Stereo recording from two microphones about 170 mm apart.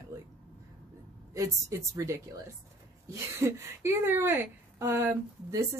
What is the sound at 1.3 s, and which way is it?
A woman's voice, 20° right (ahead or behind).